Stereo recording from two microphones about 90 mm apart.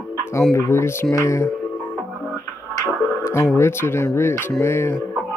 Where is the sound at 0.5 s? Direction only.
30° left (ahead or behind).